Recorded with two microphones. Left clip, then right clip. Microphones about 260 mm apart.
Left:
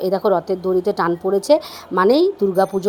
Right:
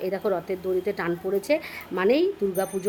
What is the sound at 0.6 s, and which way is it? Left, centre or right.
A woman's voice, centre.